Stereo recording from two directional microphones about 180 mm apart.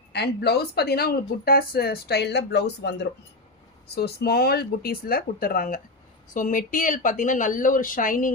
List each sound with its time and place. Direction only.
0.1 s speech: 65° left (ahead or behind); by 8.3 s 50° left (ahead or behind)